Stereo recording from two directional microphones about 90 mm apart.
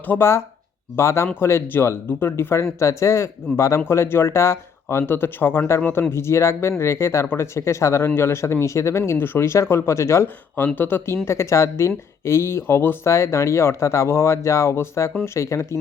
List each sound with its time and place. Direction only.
0.1 s speech: 30° left (ahead or behind)